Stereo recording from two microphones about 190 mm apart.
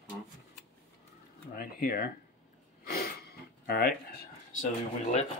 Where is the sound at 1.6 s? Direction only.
50° left (ahead or behind).